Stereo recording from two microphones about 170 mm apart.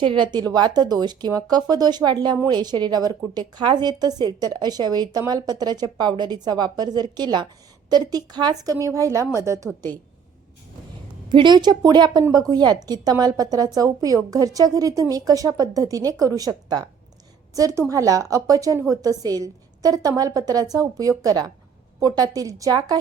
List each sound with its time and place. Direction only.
0.0 s speech: 30° right (ahead or behind)
11.3 s speech: 25° right (ahead or behind)